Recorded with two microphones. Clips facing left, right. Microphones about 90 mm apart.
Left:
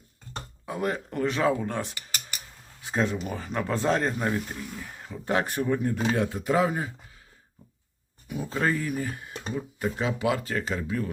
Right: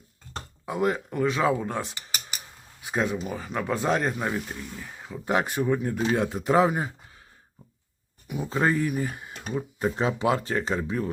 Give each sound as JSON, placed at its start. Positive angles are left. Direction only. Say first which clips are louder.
{"t": 0.6, "sound": "speech", "louder": "right 4 dB", "side_deg": -20}
{"t": 5.2, "sound": "speech", "louder": "right 1 dB", "side_deg": -15}
{"t": 6.1, "sound": "speech", "louder": "right 5 dB", "side_deg": -20}
{"t": 8.3, "sound": "speech", "louder": "right 2 dB", "side_deg": -20}